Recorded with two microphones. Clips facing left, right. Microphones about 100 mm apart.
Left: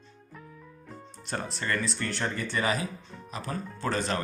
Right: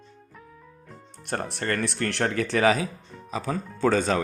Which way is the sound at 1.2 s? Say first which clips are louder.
Right 4 dB; 60° right (ahead or behind).